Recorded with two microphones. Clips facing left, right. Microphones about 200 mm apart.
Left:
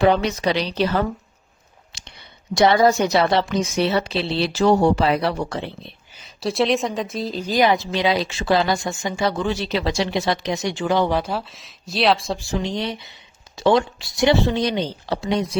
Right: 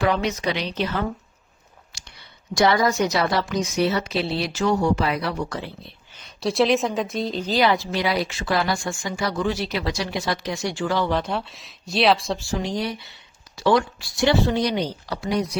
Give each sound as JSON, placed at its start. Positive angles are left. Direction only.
{"t": 0.0, "sound": "speech", "side_deg": 30}
{"t": 1.9, "sound": "a sound", "side_deg": 20}
{"t": 2.6, "sound": "a woman's voice", "side_deg": 25}
{"t": 6.1, "sound": "a woman's voice", "side_deg": 0}
{"t": 11.2, "sound": "speech", "side_deg": 0}
{"t": 12.4, "sound": "a woman's voice", "side_deg": 20}